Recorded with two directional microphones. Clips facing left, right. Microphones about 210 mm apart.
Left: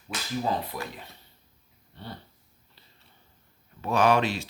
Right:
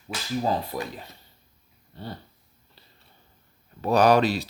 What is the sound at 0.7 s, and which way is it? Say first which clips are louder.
Speech: right 4 dB; 35° right (ahead or behind).